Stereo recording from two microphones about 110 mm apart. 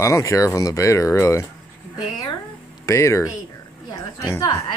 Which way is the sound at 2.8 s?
25° left (ahead or behind).